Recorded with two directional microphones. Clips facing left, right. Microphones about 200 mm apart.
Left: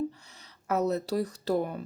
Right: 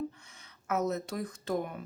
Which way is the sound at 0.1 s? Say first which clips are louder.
Left 3 dB; 35° left (ahead or behind).